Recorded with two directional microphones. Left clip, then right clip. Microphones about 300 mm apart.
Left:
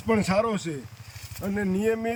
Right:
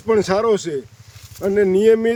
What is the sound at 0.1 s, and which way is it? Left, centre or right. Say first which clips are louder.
Speech: right 8 dB; right.